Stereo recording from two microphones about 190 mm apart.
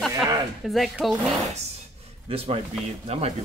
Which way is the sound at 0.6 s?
Centre (ahead or behind).